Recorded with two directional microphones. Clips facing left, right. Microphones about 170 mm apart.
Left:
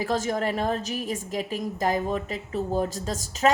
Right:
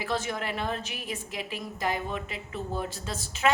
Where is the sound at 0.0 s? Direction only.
40° left (ahead or behind).